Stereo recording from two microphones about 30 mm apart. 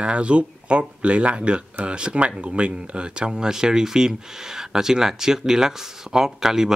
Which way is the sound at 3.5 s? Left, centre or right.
Right.